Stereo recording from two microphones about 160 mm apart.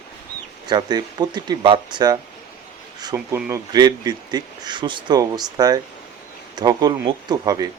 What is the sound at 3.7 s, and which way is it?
Speech, 25° right (ahead or behind).